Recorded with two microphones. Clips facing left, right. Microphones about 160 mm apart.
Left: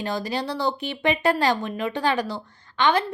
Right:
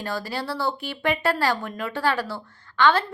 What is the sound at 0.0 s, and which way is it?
A child's voice, 20° left (ahead or behind).